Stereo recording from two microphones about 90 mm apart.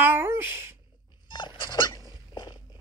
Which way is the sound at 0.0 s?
25° right (ahead or behind).